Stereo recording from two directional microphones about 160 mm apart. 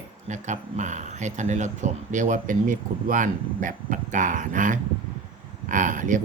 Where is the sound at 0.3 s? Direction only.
50° right (ahead or behind).